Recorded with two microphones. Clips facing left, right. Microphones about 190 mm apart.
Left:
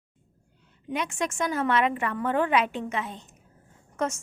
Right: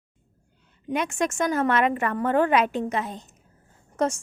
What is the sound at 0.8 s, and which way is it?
A woman's voice, 45° right (ahead or behind).